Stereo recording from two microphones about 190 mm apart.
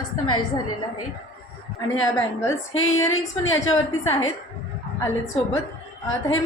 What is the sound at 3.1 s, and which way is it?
Speech, 90° left.